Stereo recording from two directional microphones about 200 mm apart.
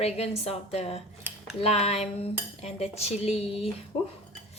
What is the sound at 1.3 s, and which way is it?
Dishes, 10° right (ahead or behind).